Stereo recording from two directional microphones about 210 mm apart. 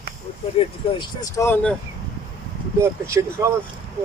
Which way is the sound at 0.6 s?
30° left (ahead or behind).